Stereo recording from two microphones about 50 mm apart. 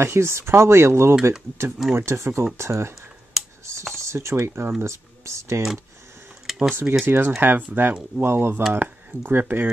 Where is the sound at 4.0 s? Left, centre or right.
Right.